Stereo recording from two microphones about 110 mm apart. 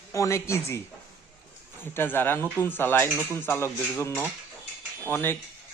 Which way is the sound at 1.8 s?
20° left (ahead or behind).